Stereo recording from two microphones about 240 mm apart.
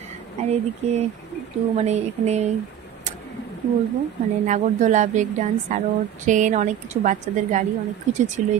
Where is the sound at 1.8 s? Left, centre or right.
Right.